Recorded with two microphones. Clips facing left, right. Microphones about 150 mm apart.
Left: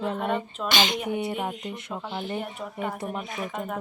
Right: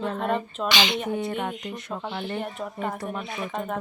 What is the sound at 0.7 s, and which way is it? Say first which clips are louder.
Speech: even; 45° left (ahead or behind).